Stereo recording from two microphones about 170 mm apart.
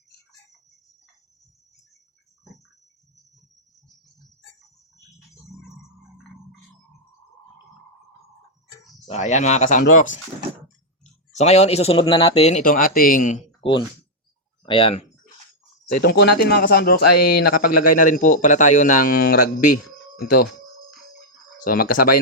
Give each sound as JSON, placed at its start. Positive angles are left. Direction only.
{"t": 9.0, "sound": "speech", "side_deg": 40}
{"t": 13.6, "sound": "speech", "side_deg": 30}
{"t": 15.9, "sound": "speech", "side_deg": 65}
{"t": 21.6, "sound": "speech", "side_deg": 55}